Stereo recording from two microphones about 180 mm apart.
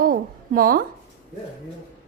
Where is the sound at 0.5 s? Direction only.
55° right (ahead or behind).